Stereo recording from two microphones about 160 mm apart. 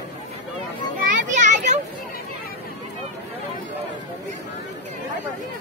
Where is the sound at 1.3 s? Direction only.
50° right (ahead or behind).